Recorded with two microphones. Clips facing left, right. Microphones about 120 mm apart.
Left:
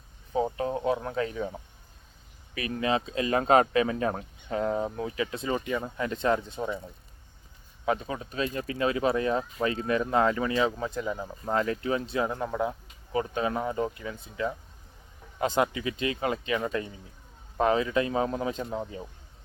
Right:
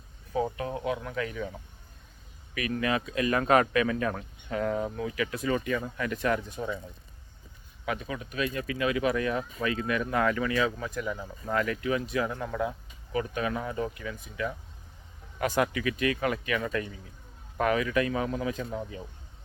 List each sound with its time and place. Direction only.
0.5 s speech: 30° left (ahead or behind)
2.6 s speech: 30° left (ahead or behind)
7.9 s speech: 30° left (ahead or behind)